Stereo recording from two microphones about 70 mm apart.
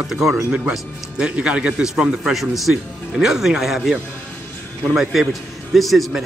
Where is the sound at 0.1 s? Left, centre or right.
Centre.